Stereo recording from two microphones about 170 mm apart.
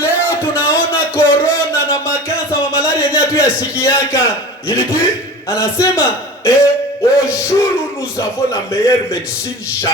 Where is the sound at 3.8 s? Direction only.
15° left (ahead or behind).